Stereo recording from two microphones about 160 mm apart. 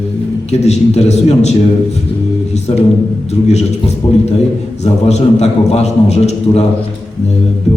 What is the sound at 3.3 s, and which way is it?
Speech, 40° left (ahead or behind).